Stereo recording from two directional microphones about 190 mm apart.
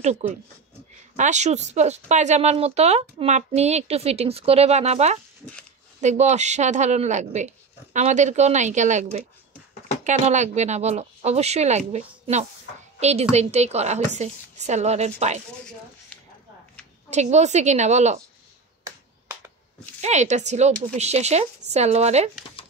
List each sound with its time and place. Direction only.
0.0 s a woman's voice: 35° right (ahead or behind)
17.1 s a woman's voice: 35° right (ahead or behind)
20.0 s a woman's voice: 35° right (ahead or behind)